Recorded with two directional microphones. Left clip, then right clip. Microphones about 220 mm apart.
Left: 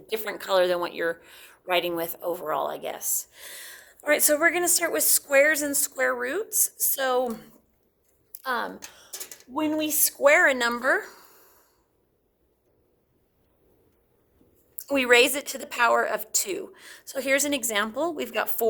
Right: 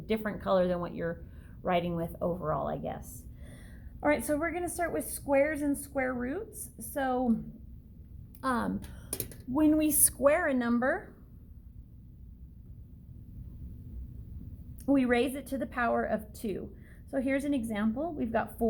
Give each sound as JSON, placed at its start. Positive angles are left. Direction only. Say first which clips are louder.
{"t": 0.3, "sound": "a woman's voice", "louder": "left 6 dB", "side_deg": 35}
{"t": 8.4, "sound": "speech", "louder": "left 3 dB", "side_deg": 10}
{"t": 9.6, "sound": "speech", "louder": "right 1 dB", "side_deg": -20}
{"t": 10.2, "sound": "a woman's voice", "louder": "left 7 dB", "side_deg": 20}
{"t": 10.4, "sound": "a woman's voice", "louder": "left 7 dB", "side_deg": 35}
{"t": 14.9, "sound": "a woman's voice", "louder": "left 10 dB", "side_deg": 45}